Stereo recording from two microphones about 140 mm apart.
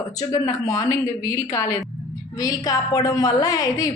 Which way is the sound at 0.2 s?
25° left (ahead or behind).